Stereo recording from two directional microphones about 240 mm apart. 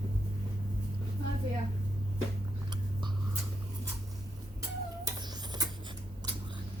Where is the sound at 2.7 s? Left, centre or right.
Centre.